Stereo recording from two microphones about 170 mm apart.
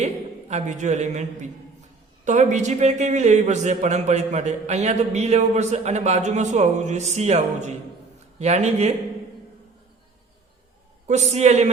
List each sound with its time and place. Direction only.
0.0 s a man's voice: 45° right (ahead or behind)
11.1 s a man's voice: 40° right (ahead or behind)